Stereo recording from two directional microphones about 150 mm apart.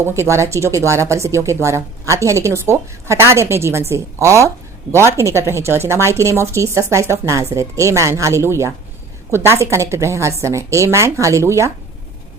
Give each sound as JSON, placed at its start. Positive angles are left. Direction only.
{"t": 0.0, "sound": "speech", "side_deg": -20}